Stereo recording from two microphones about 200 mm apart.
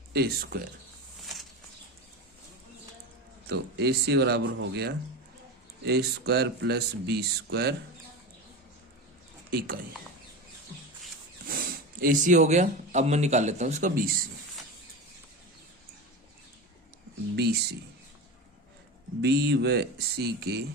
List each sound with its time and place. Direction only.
0.1 s speech: 50° right (ahead or behind)
3.4 s speech: 55° right (ahead or behind)
9.5 s speech: 50° right (ahead or behind)
11.4 s speech: 45° right (ahead or behind)
17.3 s speech: 55° right (ahead or behind)
19.2 s speech: 55° right (ahead or behind)